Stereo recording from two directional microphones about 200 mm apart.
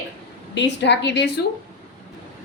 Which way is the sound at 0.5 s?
60° left (ahead or behind).